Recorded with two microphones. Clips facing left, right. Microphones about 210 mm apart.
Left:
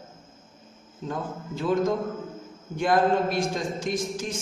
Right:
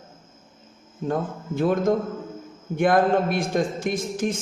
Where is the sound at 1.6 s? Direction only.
55° right (ahead or behind).